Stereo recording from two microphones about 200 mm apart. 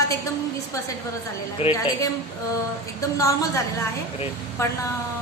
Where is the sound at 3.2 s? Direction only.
15° left (ahead or behind).